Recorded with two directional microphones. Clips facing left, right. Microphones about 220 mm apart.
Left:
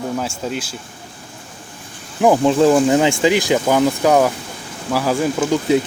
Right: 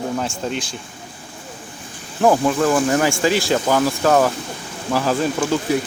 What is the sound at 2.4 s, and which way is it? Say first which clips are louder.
Speech: left 4 dB; 25° left (ahead or behind).